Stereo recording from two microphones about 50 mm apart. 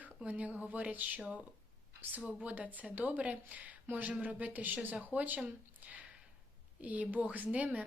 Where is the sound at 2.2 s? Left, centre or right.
Right.